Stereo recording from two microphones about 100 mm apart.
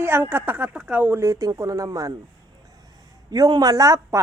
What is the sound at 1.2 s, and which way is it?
Speech, 30° right (ahead or behind).